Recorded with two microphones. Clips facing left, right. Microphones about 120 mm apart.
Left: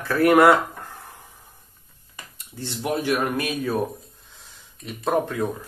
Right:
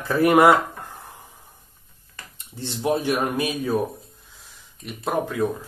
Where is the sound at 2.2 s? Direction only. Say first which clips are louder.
Even; 15° left (ahead or behind).